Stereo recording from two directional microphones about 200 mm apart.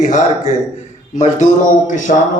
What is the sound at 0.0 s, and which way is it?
A man's voice, 35° left (ahead or behind).